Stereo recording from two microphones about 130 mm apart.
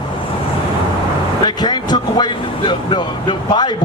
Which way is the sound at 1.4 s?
35° left (ahead or behind).